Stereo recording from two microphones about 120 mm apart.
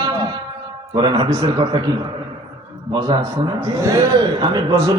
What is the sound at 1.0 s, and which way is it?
Speech, 40° right (ahead or behind).